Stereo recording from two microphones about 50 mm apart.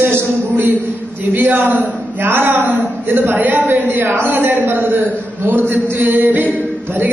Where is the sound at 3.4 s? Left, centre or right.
Right.